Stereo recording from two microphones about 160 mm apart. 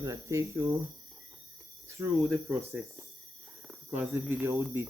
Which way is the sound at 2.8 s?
Centre (ahead or behind).